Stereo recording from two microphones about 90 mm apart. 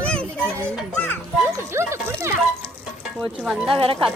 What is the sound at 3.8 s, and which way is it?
Speech, 90° right.